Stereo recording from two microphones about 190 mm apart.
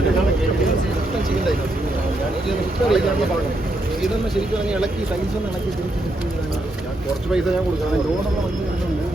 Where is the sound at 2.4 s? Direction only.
Centre (ahead or behind).